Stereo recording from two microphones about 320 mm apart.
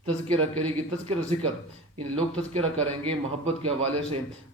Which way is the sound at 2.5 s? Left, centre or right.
Centre.